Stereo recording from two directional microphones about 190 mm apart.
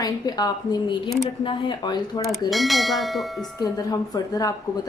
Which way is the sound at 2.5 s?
Centre (ahead or behind).